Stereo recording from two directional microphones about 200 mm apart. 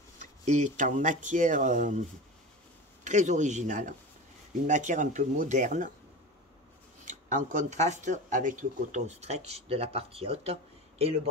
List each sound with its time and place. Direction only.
0.2 s speech: 35° right (ahead or behind)
7.1 s speech: 40° right (ahead or behind)